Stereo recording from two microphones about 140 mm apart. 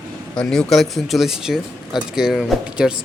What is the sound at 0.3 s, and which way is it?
Speech, 5° left (ahead or behind).